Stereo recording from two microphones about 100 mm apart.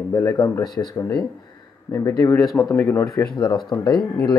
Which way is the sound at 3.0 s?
40° left (ahead or behind).